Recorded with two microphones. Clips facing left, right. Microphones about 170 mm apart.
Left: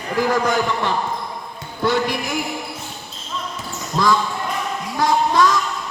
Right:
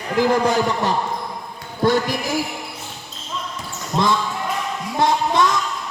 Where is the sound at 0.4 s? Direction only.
35° right (ahead or behind).